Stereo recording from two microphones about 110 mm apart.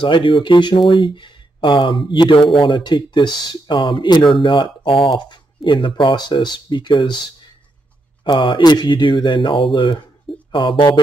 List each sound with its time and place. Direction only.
0.0 s speech: 50° left (ahead or behind)